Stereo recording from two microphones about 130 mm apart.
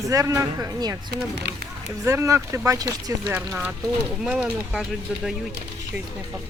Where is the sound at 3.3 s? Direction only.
15° right (ahead or behind).